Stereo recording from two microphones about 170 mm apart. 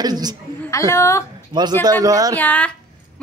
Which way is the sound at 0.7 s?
15° left (ahead or behind).